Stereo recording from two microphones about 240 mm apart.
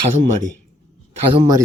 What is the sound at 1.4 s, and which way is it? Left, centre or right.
Speech, centre.